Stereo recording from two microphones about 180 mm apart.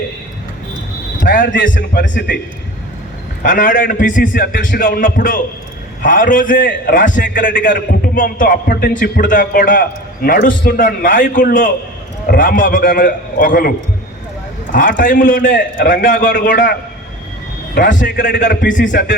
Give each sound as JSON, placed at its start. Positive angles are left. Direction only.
{"t": 1.2, "sound": "a man's voice", "side_deg": 50}
{"t": 3.4, "sound": "a man's voice", "side_deg": 50}
{"t": 16.1, "sound": "a man's voice", "side_deg": 75}
{"t": 16.5, "sound": "a man's voice", "side_deg": 50}
{"t": 17.7, "sound": "a man's voice", "side_deg": 50}